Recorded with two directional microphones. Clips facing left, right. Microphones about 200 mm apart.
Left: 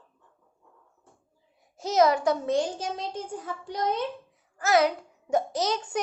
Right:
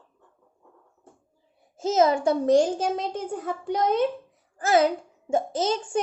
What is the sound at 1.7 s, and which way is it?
Speech, 25° right (ahead or behind).